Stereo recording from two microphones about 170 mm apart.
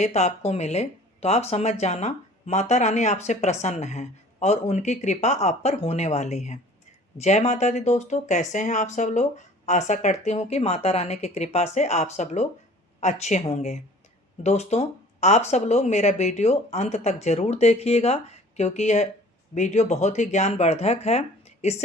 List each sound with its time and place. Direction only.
0.0 s speech: 40° left (ahead or behind)